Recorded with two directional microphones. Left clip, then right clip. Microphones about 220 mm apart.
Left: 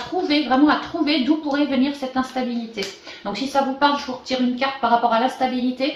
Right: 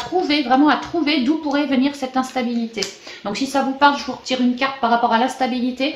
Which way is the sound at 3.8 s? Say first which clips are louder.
Right 4 dB; 40° right (ahead or behind).